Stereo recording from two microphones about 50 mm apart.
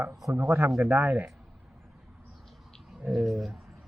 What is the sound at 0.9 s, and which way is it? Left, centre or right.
Speech, right.